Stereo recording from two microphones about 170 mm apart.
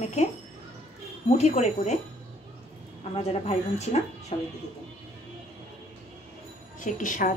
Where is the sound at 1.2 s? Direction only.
40° left (ahead or behind).